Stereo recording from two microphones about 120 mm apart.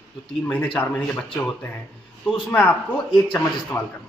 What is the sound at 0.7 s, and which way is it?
Speech, 10° left (ahead or behind).